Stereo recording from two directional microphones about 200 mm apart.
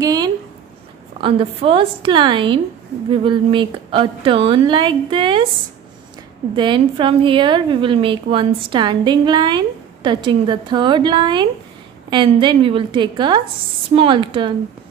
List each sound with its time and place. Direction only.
0.0 s a sound: 20° right (ahead or behind)
1.2 s a woman's voice: 30° right (ahead or behind)
6.5 s a woman's voice: 25° right (ahead or behind)